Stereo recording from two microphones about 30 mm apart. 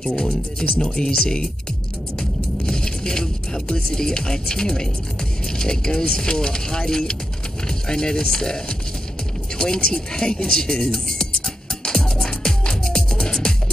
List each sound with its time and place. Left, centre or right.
0.0 s speech: left
9.6 s speech: left
11.8 s music: left